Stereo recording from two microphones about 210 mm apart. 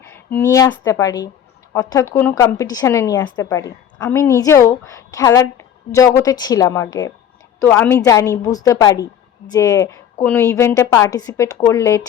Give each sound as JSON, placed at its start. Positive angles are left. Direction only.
{"t": 0.0, "sound": "a woman's voice", "side_deg": 10}